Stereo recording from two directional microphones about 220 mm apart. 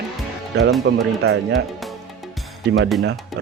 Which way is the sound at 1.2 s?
50° right (ahead or behind).